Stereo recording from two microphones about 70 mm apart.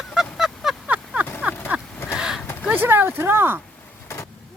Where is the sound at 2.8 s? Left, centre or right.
Right.